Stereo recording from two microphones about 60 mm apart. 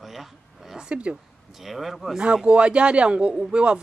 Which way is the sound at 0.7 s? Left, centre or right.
Centre.